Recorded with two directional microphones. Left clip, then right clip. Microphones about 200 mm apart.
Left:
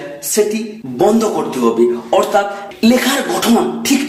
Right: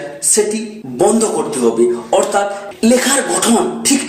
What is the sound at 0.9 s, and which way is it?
A man's voice, 15° left (ahead or behind).